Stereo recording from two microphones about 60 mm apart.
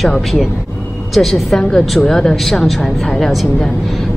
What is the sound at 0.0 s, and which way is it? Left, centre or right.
Speech, centre.